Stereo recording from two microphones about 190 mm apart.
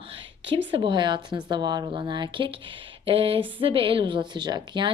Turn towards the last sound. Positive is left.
turn(degrees=-25)  # may be behind; listen again after turning